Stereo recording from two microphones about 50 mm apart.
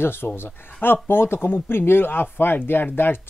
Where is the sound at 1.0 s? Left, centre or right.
Left.